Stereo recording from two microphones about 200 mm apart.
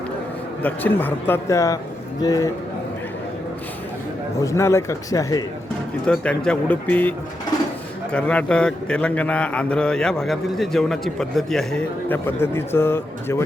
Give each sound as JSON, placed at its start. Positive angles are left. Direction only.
{"t": 0.6, "sound": "a man's voice", "side_deg": 10}
{"t": 4.4, "sound": "a man's voice", "side_deg": 15}
{"t": 6.1, "sound": "a man's voice", "side_deg": 5}
{"t": 8.1, "sound": "a man's voice", "side_deg": 5}